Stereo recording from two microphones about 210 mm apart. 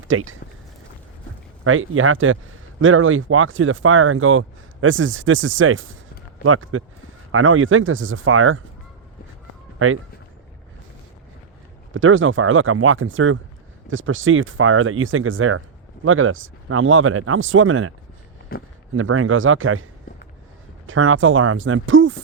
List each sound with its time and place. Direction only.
0.1 s speech: 70° right (ahead or behind)
1.6 s speech: 75° right (ahead or behind)
9.7 s speech: 85° right
11.9 s speech: 70° right (ahead or behind)
18.5 s speech: 45° left (ahead or behind)
18.9 s speech: 75° right (ahead or behind)